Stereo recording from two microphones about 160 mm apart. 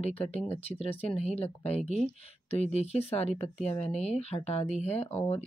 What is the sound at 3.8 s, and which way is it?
A woman's voice, 40° left (ahead or behind).